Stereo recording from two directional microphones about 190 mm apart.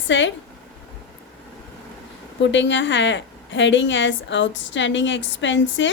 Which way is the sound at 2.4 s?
75° left (ahead or behind).